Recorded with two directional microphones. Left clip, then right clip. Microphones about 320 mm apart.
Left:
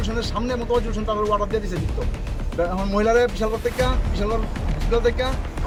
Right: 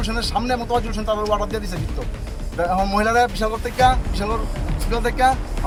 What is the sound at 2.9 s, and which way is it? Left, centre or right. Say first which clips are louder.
Speech: left 3 dB; centre.